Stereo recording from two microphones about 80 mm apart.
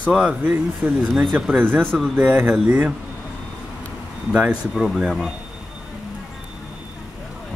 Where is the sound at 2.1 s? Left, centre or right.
Centre.